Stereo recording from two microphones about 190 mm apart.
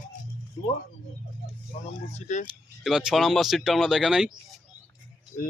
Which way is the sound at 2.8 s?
5° right (ahead or behind).